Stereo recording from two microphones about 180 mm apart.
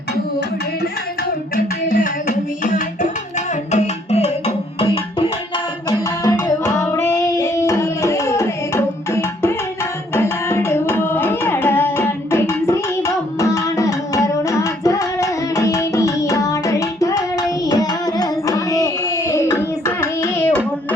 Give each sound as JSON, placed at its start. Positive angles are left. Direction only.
{"t": 1.5, "sound": "a sound", "side_deg": 50}
{"t": 3.7, "sound": "music", "side_deg": 35}
{"t": 5.9, "sound": "music", "side_deg": 15}